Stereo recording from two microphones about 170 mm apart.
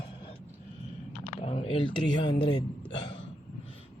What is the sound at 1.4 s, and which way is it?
Speech, 35° left (ahead or behind).